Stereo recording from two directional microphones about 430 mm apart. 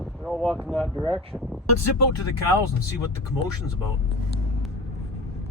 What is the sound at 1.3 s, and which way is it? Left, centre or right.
Speech, centre.